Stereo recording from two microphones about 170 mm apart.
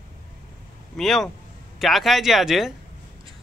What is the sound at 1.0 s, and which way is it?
A man's voice, centre (ahead or behind).